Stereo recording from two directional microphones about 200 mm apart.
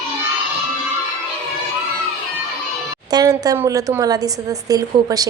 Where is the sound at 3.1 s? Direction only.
20° right (ahead or behind).